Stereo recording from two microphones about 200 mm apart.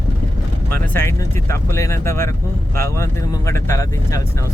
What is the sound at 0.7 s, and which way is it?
Speech, 10° left (ahead or behind).